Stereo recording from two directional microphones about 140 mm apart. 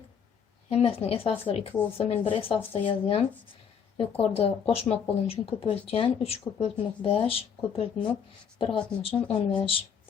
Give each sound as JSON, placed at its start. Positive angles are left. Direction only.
{"t": 0.7, "sound": "speech", "side_deg": 45}